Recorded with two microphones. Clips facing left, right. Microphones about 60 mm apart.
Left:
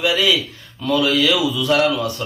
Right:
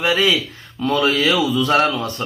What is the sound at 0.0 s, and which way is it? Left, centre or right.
A man's voice, right.